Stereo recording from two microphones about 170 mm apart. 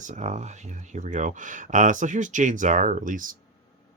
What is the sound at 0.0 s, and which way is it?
Speech, 45° right (ahead or behind).